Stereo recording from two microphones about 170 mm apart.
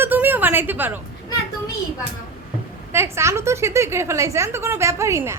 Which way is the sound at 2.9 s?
15° right (ahead or behind).